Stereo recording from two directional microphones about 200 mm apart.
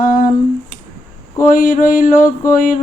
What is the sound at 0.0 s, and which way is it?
Humming, 40° left (ahead or behind).